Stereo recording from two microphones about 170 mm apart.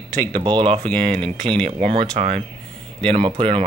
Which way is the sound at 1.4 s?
35° right (ahead or behind).